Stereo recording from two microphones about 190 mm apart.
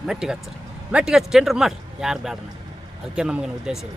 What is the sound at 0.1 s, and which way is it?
Speech, 5° right (ahead or behind).